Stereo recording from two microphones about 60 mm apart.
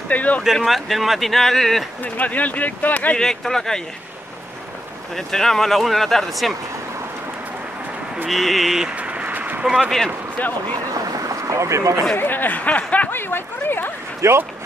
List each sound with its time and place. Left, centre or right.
0.1 s speech: left
0.7 s speech: centre
2.0 s speech: left
3.2 s speech: centre
5.1 s speech: centre
8.3 s speech: centre
8.8 s a sound: right
9.8 s speech: centre
10.4 s speech: left
11.1 s a sound: right
12.2 s speech: left
13.1 s speech: left
14.2 s speech: right